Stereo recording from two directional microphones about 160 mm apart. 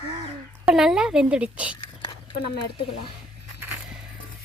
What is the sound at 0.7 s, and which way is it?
A woman's voice, 5° right (ahead or behind).